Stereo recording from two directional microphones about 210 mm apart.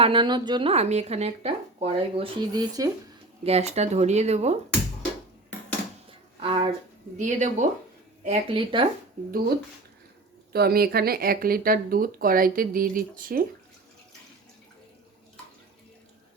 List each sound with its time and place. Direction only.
0.0 s speech: 25° right (ahead or behind)
3.4 s speech: 30° right (ahead or behind)
6.1 s a sound: 25° right (ahead or behind)
7.2 s speech: 35° right (ahead or behind)
10.5 s speech: 45° right (ahead or behind)